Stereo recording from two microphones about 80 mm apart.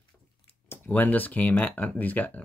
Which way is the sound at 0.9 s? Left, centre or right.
Left.